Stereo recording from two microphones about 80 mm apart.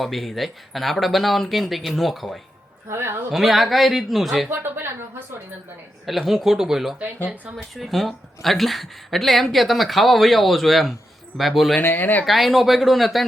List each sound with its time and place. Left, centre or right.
0.0 s speech: centre
2.9 s speech: right
3.3 s speech: centre
4.4 s a sound: right
6.1 s speech: centre
11.8 s speech: left
12.2 s speech: centre